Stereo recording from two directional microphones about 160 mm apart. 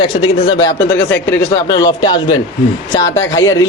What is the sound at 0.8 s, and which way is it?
A man's voice, 10° left (ahead or behind).